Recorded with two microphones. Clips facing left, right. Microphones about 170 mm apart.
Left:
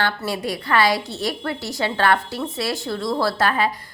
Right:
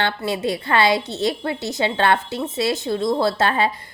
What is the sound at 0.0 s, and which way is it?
A woman's voice, 25° right (ahead or behind).